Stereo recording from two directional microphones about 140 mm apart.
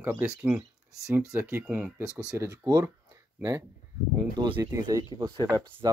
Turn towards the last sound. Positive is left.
turn(degrees=-30)  # may be behind; listen again after turning